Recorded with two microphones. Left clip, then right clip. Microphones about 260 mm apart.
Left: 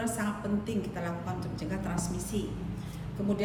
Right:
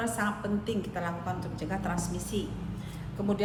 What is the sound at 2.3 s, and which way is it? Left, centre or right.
Speech, centre.